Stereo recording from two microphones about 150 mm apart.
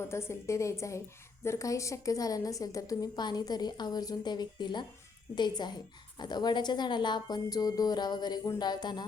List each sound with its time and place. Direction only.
0.1 s a woman's voice: 20° left (ahead or behind)